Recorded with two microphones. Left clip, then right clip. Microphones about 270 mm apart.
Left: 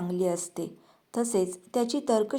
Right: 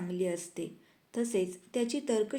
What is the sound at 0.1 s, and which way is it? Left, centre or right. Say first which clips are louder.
A woman's voice: left 5 dB; centre.